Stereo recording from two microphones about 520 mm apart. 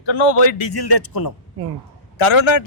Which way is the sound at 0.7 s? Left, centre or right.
Left.